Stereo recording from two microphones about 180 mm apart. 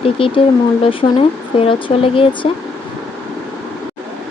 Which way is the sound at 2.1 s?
30° left (ahead or behind).